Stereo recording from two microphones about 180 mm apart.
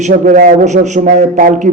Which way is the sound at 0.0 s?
50° right (ahead or behind).